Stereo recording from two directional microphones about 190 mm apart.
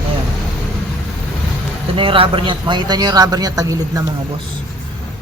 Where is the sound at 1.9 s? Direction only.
30° right (ahead or behind).